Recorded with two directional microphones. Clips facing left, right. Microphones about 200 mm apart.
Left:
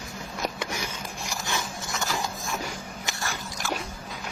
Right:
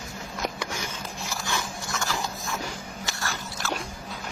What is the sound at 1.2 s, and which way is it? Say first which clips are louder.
Dog: even; 15° left (ahead or behind).